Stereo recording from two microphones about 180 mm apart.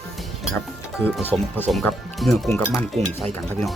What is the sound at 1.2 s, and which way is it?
Speech, 10° left (ahead or behind).